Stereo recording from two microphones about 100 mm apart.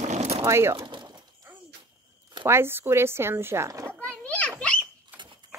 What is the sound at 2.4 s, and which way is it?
Speech, 25° right (ahead or behind).